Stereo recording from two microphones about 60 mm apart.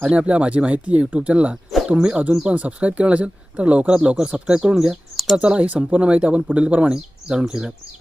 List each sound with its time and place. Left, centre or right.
0.0 s speech: centre
5.1 s bird: centre
5.4 s speech: right